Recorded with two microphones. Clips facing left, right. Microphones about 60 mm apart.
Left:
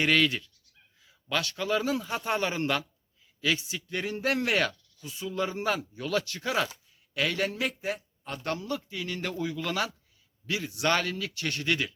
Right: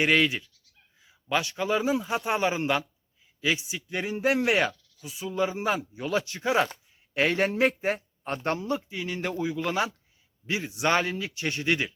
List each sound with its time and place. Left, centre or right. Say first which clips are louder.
0.0 s a man's voice: right 2 dB; centre